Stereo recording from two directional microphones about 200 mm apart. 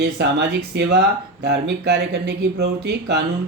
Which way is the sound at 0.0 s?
55° right (ahead or behind).